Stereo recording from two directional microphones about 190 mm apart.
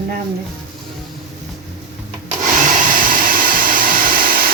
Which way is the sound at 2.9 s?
45° right (ahead or behind).